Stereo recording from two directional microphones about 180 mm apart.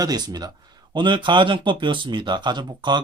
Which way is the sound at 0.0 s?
20° right (ahead or behind).